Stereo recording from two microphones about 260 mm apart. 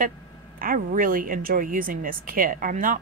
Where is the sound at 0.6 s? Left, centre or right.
Right.